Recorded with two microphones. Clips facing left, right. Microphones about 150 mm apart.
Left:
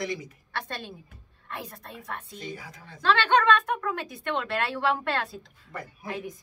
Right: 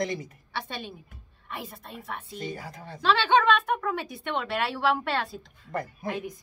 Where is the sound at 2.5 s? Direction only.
55° right (ahead or behind).